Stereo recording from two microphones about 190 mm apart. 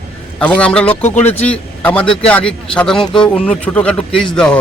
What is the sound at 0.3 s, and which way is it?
A man's voice, 5° left (ahead or behind).